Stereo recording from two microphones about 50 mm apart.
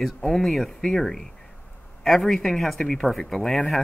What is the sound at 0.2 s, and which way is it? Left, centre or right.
Speech, centre.